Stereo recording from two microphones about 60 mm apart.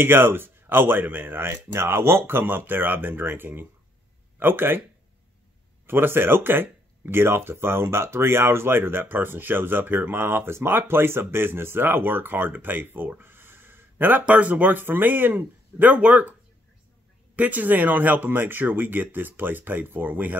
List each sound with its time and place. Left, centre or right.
0.0 s speech: right
5.9 s speech: right
14.2 s speech: right
17.4 s speech: right